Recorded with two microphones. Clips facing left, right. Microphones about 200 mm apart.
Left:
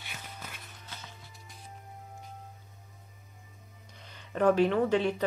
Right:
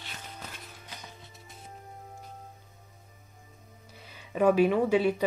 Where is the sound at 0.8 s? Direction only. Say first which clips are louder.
Right 1 dB; 20° right (ahead or behind).